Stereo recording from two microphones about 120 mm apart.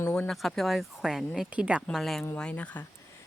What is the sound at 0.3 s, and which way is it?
Speech, centre (ahead or behind).